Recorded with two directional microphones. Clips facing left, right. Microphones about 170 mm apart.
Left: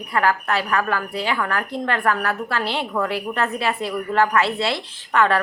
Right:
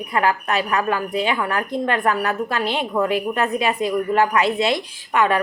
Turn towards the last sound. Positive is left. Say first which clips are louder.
# even
turn(degrees=-15)  # may be behind; listen again after turning